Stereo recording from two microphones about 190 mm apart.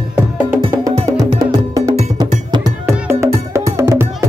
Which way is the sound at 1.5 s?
20° right (ahead or behind).